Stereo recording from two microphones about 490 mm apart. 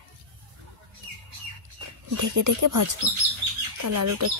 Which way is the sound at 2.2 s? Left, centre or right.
Right.